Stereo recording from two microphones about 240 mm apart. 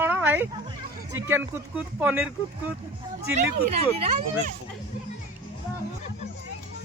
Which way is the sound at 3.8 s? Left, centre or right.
Right.